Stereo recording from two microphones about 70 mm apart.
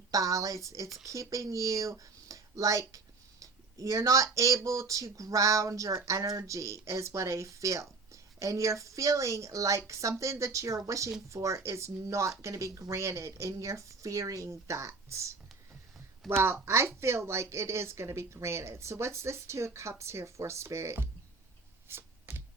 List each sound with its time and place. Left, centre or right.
0.1 s speech: right
16.4 s a woman's voice: right
21.8 s a sound: right